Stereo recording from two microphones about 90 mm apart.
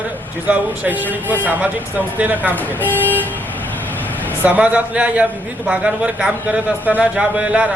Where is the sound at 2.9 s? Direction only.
20° left (ahead or behind).